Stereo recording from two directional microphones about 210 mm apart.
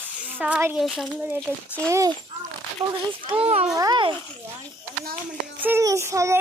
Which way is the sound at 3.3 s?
30° right (ahead or behind).